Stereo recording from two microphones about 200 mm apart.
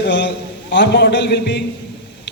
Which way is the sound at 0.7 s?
60° left (ahead or behind).